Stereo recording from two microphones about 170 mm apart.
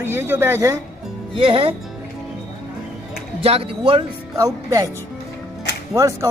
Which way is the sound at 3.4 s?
35° right (ahead or behind).